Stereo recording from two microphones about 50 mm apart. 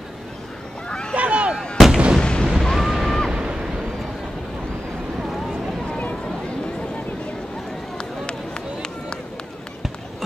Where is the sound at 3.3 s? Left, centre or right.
Centre.